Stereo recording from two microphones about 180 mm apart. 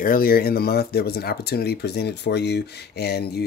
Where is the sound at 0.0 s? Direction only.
55° left (ahead or behind).